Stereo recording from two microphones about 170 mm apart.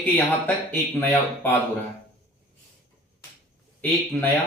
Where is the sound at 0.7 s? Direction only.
10° left (ahead or behind).